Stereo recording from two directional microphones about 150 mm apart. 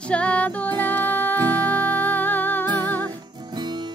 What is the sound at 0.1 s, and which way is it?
Music, 10° left (ahead or behind).